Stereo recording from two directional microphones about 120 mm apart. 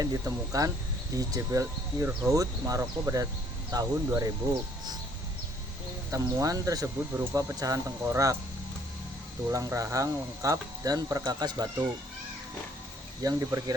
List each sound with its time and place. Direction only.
0.0 s speech: 30° right (ahead or behind)
6.1 s speech: 30° right (ahead or behind)
9.5 s speech: 25° right (ahead or behind)
13.2 s speech: 30° right (ahead or behind)